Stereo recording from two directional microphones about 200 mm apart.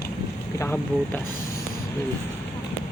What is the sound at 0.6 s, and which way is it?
Speech, 10° left (ahead or behind).